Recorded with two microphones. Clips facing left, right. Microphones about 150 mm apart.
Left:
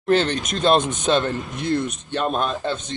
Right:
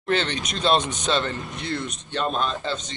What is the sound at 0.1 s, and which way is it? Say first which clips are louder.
Speech: left 5 dB; 45° left (ahead or behind).